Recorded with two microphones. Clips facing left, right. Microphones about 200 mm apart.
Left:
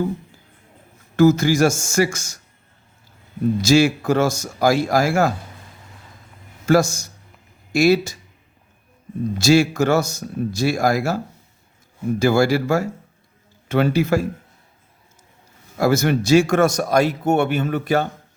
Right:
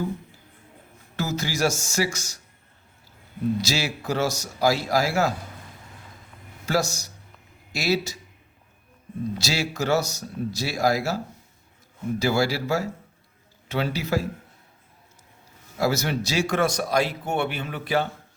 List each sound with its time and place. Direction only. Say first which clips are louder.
1.1 s a man's voice: left 14 dB; 50° left (ahead or behind)
3.6 s a man's voice: left 12 dB; 50° left (ahead or behind)
6.7 s a man's voice: left 8 dB; 50° left (ahead or behind)
9.4 s a man's voice: left 14 dB; 50° left (ahead or behind)
12.2 s a man's voice: left 7 dB; 50° left (ahead or behind)
15.8 s a man's voice: left 6 dB; 50° left (ahead or behind)